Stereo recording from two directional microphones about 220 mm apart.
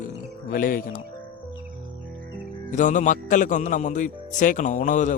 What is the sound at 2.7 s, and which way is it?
Speech, 35° left (ahead or behind).